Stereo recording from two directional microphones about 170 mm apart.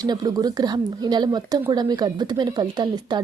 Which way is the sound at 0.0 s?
25° right (ahead or behind).